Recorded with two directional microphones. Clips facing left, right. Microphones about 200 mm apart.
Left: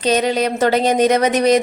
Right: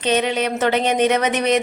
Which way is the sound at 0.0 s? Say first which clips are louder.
Left 3 dB; 40° left (ahead or behind).